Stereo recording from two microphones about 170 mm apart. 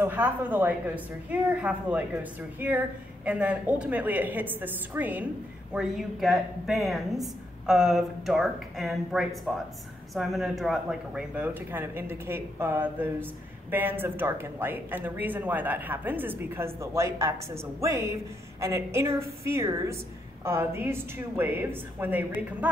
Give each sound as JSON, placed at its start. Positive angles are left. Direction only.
{"t": 0.0, "sound": "a woman's voice", "side_deg": -10}